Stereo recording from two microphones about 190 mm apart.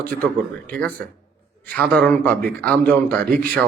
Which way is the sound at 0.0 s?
10° left (ahead or behind).